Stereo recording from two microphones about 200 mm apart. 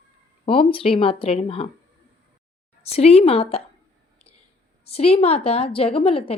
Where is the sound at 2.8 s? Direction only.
30° left (ahead or behind).